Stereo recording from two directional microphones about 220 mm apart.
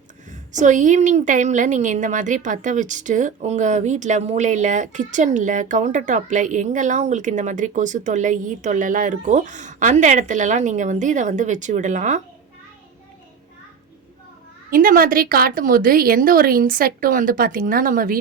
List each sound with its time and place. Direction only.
0.3 s a woman's voice: 35° right (ahead or behind)
14.7 s a woman's voice: 40° right (ahead or behind)